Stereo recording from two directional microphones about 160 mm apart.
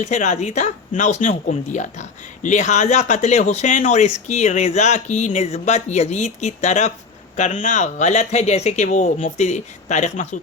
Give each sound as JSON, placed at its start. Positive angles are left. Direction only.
{"t": 0.0, "sound": "speech", "side_deg": 50}